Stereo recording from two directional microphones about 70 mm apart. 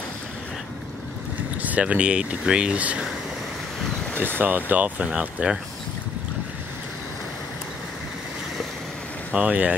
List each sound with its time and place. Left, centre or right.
1.6 s speech: right
4.4 s speech: right
9.3 s speech: centre